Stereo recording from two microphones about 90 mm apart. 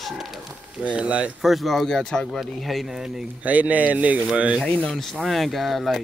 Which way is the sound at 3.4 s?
15° right (ahead or behind).